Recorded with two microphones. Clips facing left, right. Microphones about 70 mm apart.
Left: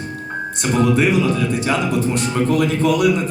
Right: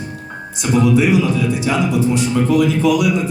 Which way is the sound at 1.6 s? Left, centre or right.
Left.